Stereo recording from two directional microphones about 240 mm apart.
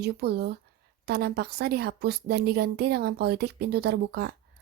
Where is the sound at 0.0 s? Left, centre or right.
Right.